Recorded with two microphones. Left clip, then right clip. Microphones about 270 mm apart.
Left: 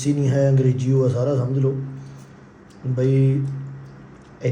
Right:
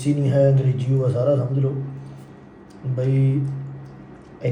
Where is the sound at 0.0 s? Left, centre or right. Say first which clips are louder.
Right 2 dB; left.